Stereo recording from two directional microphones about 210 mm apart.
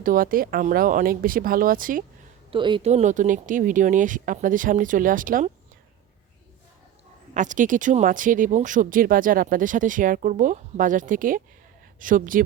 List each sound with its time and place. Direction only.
0.0 s speech: 40° right (ahead or behind)
2.5 s speech: 25° right (ahead or behind); by 5.5 s 40° right (ahead or behind)
7.3 s speech: 35° right (ahead or behind)